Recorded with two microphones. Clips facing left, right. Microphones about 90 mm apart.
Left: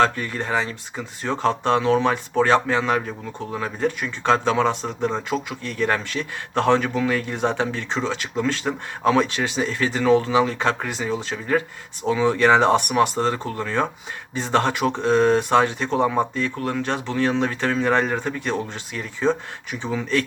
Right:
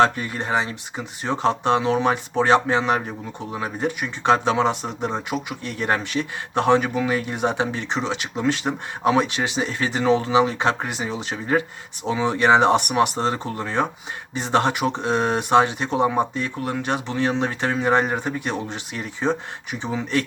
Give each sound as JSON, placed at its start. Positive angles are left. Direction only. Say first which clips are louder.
{"t": 0.0, "sound": "speech", "louder": "right 1 dB", "side_deg": -20}